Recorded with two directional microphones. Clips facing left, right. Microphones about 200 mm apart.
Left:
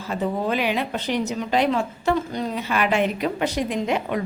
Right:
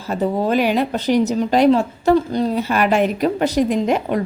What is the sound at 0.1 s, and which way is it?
Speech, 40° right (ahead or behind).